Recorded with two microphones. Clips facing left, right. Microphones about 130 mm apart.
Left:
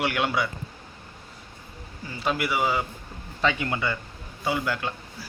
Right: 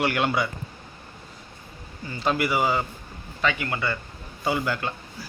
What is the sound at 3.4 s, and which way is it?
Speech, 25° left (ahead or behind).